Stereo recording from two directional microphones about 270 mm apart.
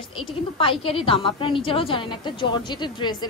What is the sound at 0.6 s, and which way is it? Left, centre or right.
A woman's voice, centre.